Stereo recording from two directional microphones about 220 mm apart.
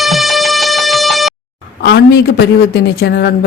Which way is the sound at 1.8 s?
45° left (ahead or behind).